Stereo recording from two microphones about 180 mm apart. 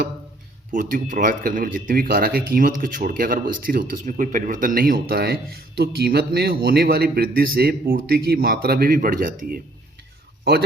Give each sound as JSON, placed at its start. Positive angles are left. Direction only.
{"t": 0.7, "sound": "speech", "side_deg": -45}